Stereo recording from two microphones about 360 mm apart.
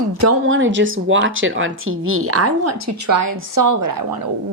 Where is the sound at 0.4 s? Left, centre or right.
Right.